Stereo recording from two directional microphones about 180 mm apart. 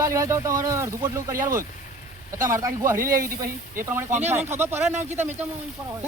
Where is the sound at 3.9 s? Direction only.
10° right (ahead or behind).